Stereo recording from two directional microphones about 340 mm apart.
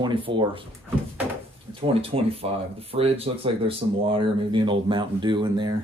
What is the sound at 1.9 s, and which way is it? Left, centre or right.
Speech, centre.